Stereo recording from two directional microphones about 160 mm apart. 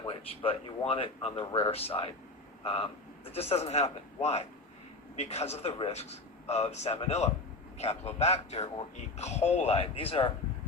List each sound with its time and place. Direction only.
0.1 s speech: 35° left (ahead or behind)